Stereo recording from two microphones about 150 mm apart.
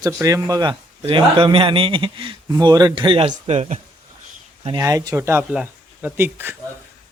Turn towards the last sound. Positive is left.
turn(degrees=-15)  # may be behind; listen again after turning